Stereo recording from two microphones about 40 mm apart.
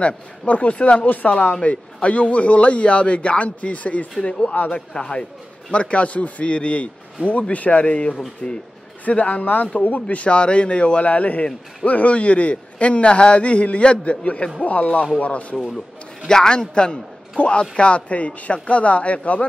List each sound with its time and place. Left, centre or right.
0.0 s a man's voice: left
1.0 s a man's voice: left
4.4 s a man's voice: left
8.4 s speech: centre
9.0 s a man's voice: left
10.0 s a man's voice: left
16.3 s a man's voice: centre